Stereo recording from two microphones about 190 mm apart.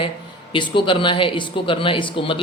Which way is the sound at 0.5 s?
25° left (ahead or behind).